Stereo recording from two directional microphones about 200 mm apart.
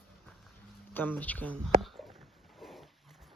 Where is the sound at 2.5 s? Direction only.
Centre (ahead or behind).